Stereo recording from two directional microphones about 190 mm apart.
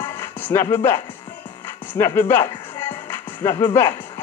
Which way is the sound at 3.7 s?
15° left (ahead or behind).